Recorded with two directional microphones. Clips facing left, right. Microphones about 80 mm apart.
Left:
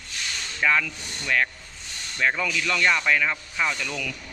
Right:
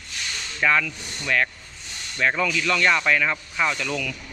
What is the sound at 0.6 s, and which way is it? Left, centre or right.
Speech, centre.